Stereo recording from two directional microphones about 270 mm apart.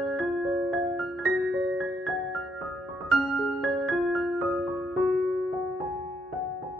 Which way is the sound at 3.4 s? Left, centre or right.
Centre.